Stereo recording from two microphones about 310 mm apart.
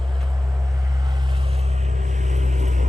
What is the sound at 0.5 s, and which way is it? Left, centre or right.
Vehicle, centre.